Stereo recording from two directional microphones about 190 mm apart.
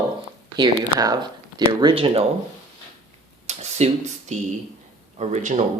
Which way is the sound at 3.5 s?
35° right (ahead or behind).